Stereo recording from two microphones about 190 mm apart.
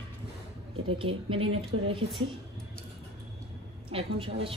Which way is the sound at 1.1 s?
30° right (ahead or behind).